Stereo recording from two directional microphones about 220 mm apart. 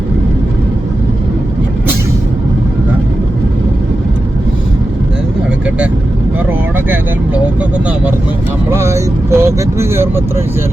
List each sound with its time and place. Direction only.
8.7 s vehicle: 10° right (ahead or behind)